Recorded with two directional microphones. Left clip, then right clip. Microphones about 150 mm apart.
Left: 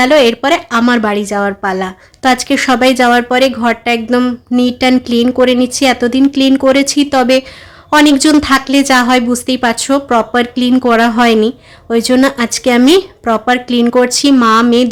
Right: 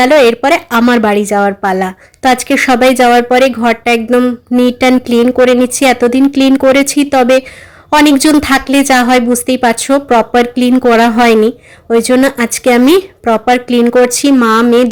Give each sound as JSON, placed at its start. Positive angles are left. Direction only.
{"t": 0.0, "sound": "a woman's voice", "side_deg": -15}